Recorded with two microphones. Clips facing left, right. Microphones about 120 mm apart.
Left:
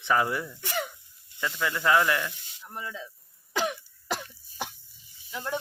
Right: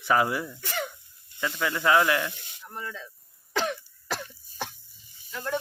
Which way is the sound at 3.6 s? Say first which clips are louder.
Even; 15° left (ahead or behind).